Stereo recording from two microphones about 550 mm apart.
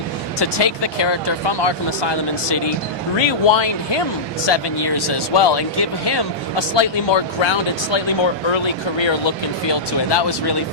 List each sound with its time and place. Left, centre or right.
0.3 s speech: left